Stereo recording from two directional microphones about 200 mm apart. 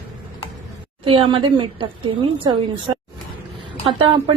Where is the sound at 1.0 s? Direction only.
25° right (ahead or behind).